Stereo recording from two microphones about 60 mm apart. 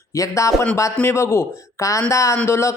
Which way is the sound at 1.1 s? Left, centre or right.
Left.